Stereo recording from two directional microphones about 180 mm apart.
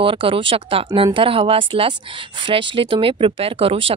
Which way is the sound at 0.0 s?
30° right (ahead or behind).